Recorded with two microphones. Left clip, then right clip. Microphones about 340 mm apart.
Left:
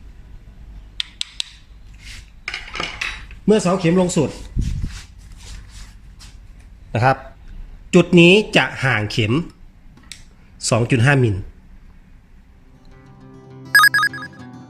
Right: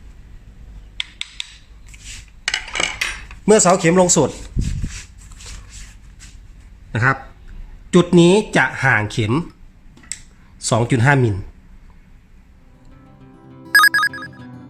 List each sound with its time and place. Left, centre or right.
2.4 s cutlery: right
3.4 s speech: right
4.2 s speech: right
6.9 s speech: centre
10.6 s speech: centre
13.7 s ringtone: centre